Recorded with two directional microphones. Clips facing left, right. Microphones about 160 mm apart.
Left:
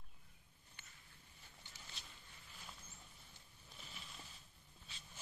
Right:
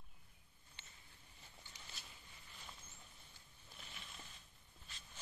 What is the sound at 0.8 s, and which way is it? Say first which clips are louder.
Mouse: right 1 dB; 25° right (ahead or behind).